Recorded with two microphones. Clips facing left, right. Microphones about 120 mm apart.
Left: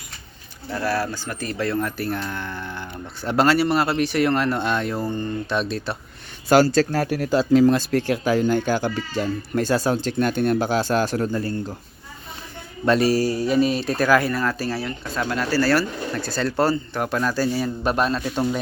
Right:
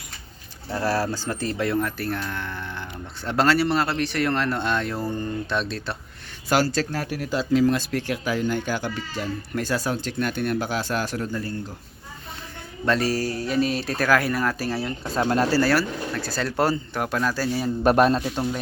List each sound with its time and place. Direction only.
0.8 s speech: 35° right (ahead or behind); by 1.8 s 15° right (ahead or behind)
1.8 s speech: centre (ahead or behind)
5.0 s speech: 5° right (ahead or behind)
5.5 s speech: 5° left (ahead or behind)
6.7 s speech: 40° left (ahead or behind)
12.8 s speech: 15° left (ahead or behind); by 14.8 s 10° right (ahead or behind)
15.1 s speech: 35° right (ahead or behind)
15.7 s speech: centre (ahead or behind)
17.0 s speech: centre (ahead or behind)
17.8 s a man's voice: 50° right (ahead or behind)
18.3 s speech: centre (ahead or behind)